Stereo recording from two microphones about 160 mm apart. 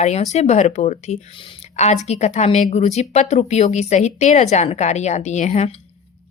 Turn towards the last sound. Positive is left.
turn(degrees=45)  # may be behind; listen again after turning